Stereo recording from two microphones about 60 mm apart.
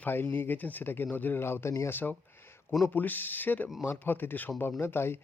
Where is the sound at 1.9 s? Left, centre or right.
Left.